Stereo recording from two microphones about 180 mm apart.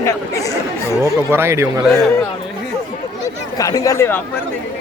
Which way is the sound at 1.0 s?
15° right (ahead or behind).